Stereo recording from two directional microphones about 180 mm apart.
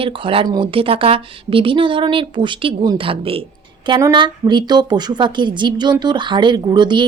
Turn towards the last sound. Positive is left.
turn(degrees=-25)  # may be behind; listen again after turning